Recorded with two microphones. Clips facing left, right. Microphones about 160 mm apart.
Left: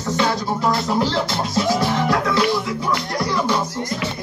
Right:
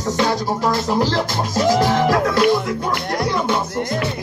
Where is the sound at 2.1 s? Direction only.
50° right (ahead or behind).